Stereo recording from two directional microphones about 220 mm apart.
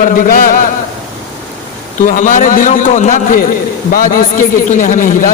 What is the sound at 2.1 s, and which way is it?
A man's voice, 35° left (ahead or behind).